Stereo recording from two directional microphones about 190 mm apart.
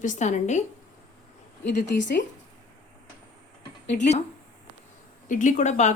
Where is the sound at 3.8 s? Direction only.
40° left (ahead or behind).